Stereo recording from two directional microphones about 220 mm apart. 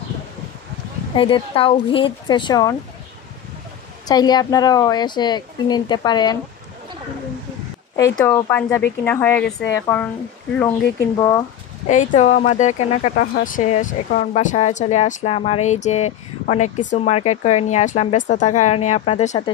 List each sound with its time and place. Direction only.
1.1 s speech: 25° left (ahead or behind)
4.1 s speech: 20° left (ahead or behind)
8.2 s speech: 10° left (ahead or behind)
11.9 s speech: 35° left (ahead or behind)